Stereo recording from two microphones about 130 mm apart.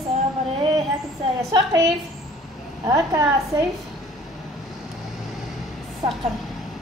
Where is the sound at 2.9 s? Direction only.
25° right (ahead or behind).